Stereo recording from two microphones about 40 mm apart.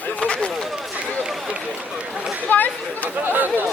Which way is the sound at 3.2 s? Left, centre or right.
Right.